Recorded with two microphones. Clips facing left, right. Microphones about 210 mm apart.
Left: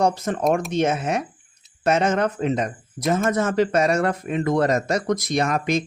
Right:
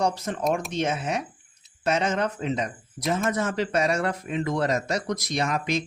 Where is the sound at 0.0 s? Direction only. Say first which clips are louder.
Left 5 dB; 50° left (ahead or behind).